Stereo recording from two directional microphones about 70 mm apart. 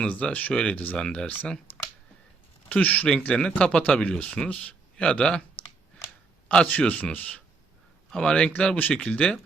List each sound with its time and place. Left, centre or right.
0.0 s speech: centre
2.7 s a man's voice: left
5.6 s a sound: left
6.5 s speech: centre